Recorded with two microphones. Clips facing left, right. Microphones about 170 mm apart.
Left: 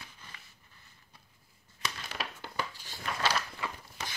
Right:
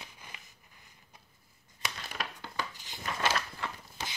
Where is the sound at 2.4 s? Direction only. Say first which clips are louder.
Left 1 dB; 20° right (ahead or behind).